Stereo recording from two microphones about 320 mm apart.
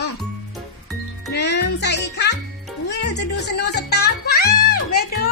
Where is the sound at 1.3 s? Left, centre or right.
Left.